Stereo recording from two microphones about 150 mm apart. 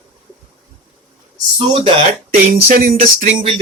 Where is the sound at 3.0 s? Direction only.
60° right (ahead or behind).